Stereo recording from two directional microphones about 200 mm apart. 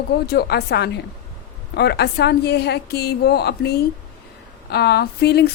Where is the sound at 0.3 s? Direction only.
55° left (ahead or behind).